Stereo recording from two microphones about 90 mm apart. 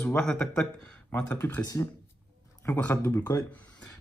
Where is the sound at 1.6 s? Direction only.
45° left (ahead or behind).